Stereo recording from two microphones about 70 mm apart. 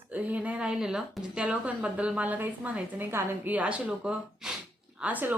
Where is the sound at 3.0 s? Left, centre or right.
Right.